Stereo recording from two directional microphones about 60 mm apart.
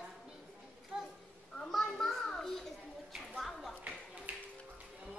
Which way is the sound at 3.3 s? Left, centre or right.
Centre.